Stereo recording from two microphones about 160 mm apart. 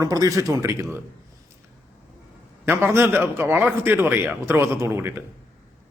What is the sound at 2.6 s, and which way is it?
A man's voice, 15° right (ahead or behind).